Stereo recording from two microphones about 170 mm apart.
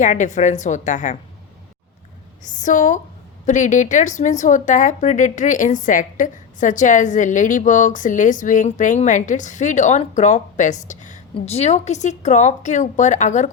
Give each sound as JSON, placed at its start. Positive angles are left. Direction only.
{"t": 0.0, "sound": "speech", "side_deg": 45}
{"t": 2.4, "sound": "speech", "side_deg": 50}